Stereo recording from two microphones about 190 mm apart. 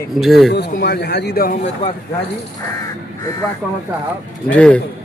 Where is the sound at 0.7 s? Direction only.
60° left (ahead or behind).